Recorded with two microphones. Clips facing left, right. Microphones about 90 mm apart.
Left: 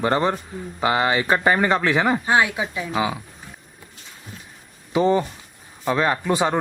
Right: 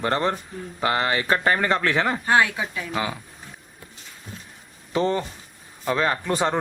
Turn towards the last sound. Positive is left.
turn(degrees=5)  # may be behind; listen again after turning